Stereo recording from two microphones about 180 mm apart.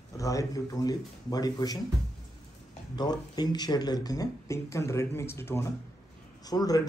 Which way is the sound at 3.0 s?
20° left (ahead or behind).